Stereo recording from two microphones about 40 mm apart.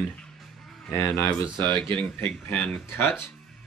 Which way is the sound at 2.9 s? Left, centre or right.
Left.